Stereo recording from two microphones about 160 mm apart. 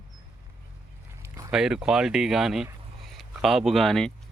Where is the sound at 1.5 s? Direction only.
5° right (ahead or behind).